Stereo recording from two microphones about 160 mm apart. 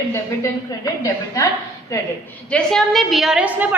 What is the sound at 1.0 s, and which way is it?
Speech, 20° left (ahead or behind).